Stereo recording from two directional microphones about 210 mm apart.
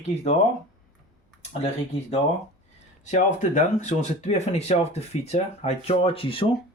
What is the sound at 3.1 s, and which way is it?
Speech, 35° left (ahead or behind).